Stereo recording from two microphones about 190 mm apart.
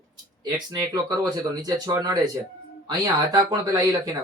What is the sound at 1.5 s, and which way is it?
Speech, 20° right (ahead or behind).